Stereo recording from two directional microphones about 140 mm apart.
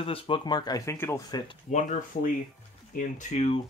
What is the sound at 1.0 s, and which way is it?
Speech, 20° left (ahead or behind).